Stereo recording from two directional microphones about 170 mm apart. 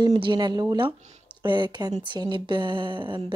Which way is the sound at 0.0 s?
25° right (ahead or behind).